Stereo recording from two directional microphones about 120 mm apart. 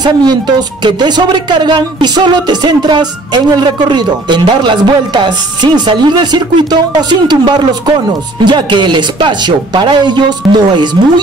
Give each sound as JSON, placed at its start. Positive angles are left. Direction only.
{"t": 0.0, "sound": "speech", "side_deg": -35}